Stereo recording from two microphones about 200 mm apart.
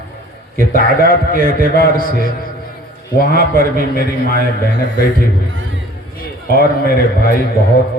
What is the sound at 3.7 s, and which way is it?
Speech, 45° left (ahead or behind).